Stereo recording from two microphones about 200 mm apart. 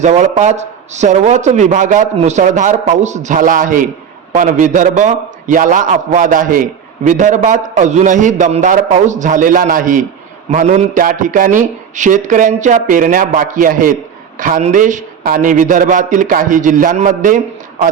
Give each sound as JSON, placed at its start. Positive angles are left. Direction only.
{"t": 0.0, "sound": "a man's voice", "side_deg": -35}